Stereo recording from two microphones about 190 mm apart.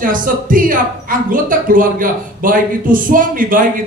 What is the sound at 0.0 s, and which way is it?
Speech, 45° right (ahead or behind).